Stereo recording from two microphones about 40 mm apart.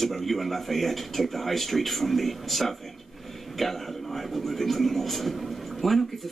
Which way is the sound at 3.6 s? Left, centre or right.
Centre.